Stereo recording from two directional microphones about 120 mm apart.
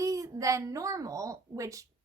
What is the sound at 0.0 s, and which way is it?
A woman's voice, 25° right (ahead or behind).